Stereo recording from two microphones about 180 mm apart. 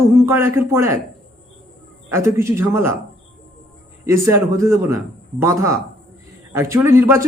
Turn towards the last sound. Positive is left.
turn(degrees=-15)  # may be behind; listen again after turning